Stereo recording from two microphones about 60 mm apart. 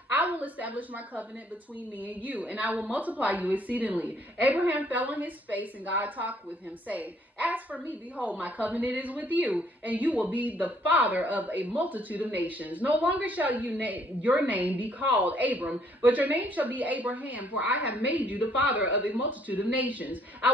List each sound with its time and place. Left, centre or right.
0.1 s a woman's voice: right